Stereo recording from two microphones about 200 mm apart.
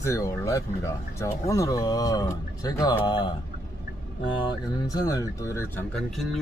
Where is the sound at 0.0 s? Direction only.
15° left (ahead or behind).